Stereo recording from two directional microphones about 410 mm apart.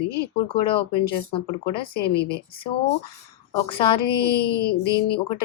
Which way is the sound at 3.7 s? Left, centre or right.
Centre.